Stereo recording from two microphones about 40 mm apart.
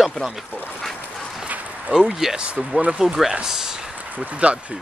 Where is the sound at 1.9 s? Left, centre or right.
Centre.